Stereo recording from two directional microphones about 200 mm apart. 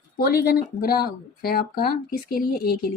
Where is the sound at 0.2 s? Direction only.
50° left (ahead or behind).